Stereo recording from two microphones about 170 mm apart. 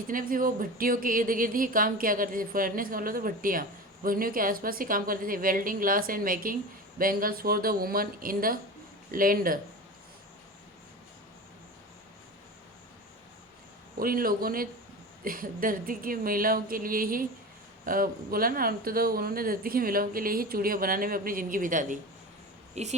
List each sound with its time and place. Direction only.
0.1 s speech: 55° right (ahead or behind)
14.0 s speech: 60° right (ahead or behind); by 23.0 s 40° right (ahead or behind)